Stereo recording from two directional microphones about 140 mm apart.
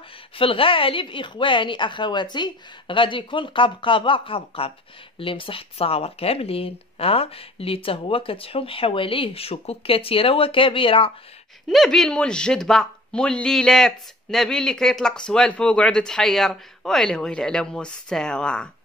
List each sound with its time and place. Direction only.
0.4 s speech: 40° left (ahead or behind)
11.7 s speech: centre (ahead or behind)